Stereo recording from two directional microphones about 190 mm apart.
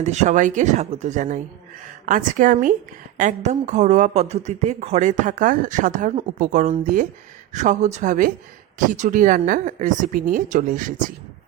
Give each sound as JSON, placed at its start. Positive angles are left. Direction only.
{"t": 0.0, "sound": "speech", "side_deg": -40}